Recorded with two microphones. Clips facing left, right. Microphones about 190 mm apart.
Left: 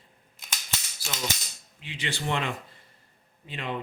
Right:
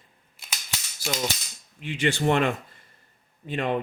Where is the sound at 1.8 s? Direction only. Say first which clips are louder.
Right 9 dB; 50° right (ahead or behind).